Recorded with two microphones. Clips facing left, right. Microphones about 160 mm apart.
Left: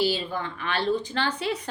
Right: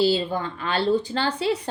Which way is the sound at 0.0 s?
30° right (ahead or behind).